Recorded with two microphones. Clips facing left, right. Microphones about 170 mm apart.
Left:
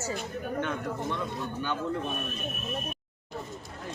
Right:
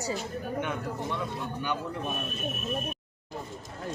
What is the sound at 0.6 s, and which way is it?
Speech, 15° right (ahead or behind).